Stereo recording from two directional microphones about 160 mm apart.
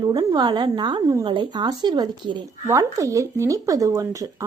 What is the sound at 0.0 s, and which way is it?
Speech, 25° right (ahead or behind).